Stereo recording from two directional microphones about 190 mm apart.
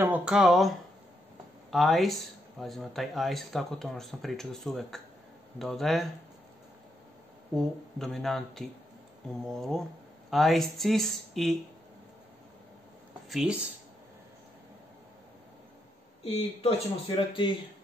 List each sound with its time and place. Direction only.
0.0 s speech: 5° right (ahead or behind)
7.5 s speech: centre (ahead or behind)
13.3 s speech: centre (ahead or behind)
16.6 s speech: 25° left (ahead or behind)